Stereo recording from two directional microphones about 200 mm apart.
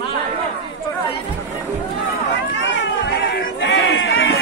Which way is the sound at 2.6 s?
60° left (ahead or behind).